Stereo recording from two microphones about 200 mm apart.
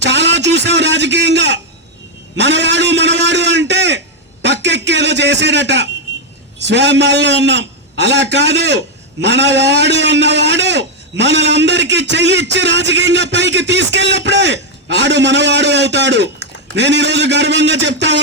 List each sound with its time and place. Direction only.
0.0 s a man's voice: 60° right (ahead or behind)
4.4 s a sound: 60° right (ahead or behind)
6.7 s a man's voice: 60° right (ahead or behind)